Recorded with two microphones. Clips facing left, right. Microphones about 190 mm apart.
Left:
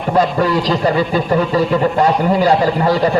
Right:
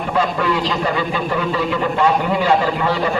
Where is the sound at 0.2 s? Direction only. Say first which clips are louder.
Left 4 dB; 40° left (ahead or behind).